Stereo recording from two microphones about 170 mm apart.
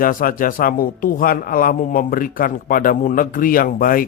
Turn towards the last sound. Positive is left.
turn(degrees=55)  # may be behind; listen again after turning